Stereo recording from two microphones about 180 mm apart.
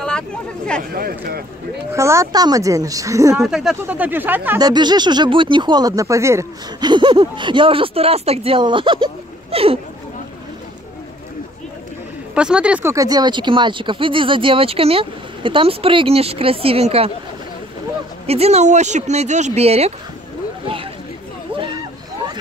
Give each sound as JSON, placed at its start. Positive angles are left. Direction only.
{"t": 0.9, "sound": "speech", "side_deg": -55}
{"t": 2.0, "sound": "speech", "side_deg": -15}
{"t": 3.3, "sound": "speech", "side_deg": -5}
{"t": 4.6, "sound": "speech", "side_deg": -25}
{"t": 12.4, "sound": "speech", "side_deg": -5}
{"t": 12.9, "sound": "speech", "side_deg": -20}
{"t": 18.2, "sound": "speech", "side_deg": -35}
{"t": 20.6, "sound": "a sound", "side_deg": -30}